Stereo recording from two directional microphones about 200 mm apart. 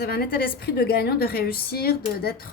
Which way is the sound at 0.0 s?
50° left (ahead or behind).